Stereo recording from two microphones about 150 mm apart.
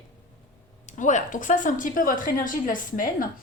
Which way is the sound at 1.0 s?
55° left (ahead or behind).